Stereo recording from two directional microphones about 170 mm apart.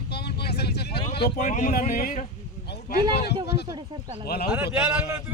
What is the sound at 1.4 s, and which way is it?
Speech, 45° left (ahead or behind).